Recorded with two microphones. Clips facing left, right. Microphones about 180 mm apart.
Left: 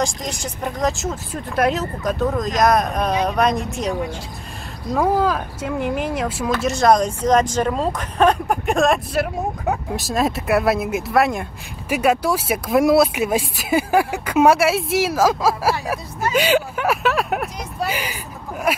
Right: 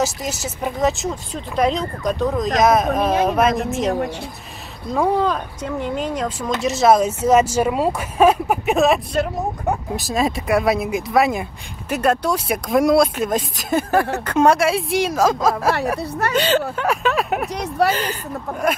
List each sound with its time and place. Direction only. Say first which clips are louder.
0.0 s speech: right 1 dB; 5° right (ahead or behind)
4.9 s speech: even; centre (ahead or behind)
6.6 s speech: right 2 dB; centre (ahead or behind)
16.0 s speech: right 3 dB; 65° right (ahead or behind)
16.3 s speech: left 1 dB; 10° left (ahead or behind)
17.8 s speech: right 7 dB; 70° right (ahead or behind)